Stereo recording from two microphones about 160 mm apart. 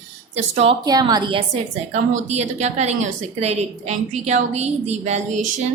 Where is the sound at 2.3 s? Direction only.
45° right (ahead or behind).